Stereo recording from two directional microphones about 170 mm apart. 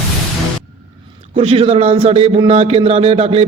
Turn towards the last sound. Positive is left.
turn(degrees=-35)  # may be behind; listen again after turning